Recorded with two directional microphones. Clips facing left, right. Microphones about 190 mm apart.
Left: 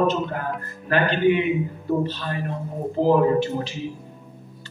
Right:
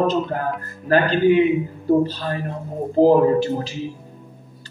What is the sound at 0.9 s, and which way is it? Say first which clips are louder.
Speech: right 4 dB; 35° right (ahead or behind).